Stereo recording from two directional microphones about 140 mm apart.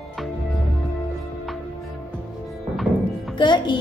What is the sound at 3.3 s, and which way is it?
Speech, 35° left (ahead or behind).